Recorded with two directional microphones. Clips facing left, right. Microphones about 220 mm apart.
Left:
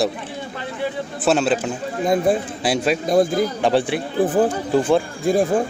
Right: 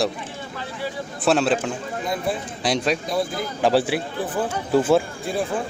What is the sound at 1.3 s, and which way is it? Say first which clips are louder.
Speech: left 1 dB; centre (ahead or behind).